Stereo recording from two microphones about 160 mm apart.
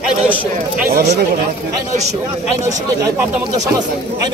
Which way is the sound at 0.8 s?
80° right.